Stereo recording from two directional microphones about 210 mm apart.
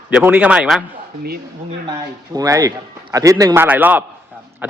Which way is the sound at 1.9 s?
15° right (ahead or behind).